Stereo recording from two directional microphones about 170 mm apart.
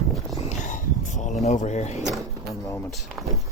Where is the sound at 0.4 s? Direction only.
45° left (ahead or behind).